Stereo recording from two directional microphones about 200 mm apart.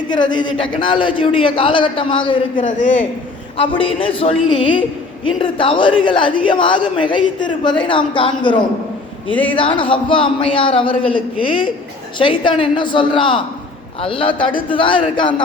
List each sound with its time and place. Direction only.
0.1 s a woman's voice: 20° left (ahead or behind)
2.6 s a man's voice: 40° left (ahead or behind)
3.6 s a woman's voice: 25° left (ahead or behind)
9.3 s a man's voice: 5° left (ahead or behind)
9.6 s a woman's voice: 25° left (ahead or behind)